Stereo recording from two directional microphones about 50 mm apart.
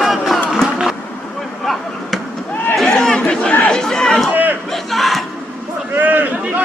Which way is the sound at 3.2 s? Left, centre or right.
Left.